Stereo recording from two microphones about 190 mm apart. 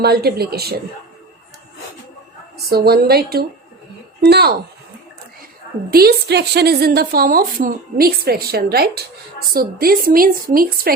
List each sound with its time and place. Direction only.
0.0 s a woman's voice: 55° right (ahead or behind)
2.6 s a woman's voice: 55° right (ahead or behind)
5.9 s a woman's voice: 55° right (ahead or behind)